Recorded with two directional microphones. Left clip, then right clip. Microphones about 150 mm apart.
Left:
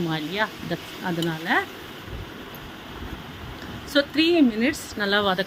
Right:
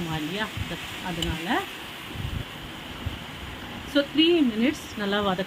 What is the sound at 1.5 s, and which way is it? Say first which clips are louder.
Speech: left 5 dB; 45° left (ahead or behind).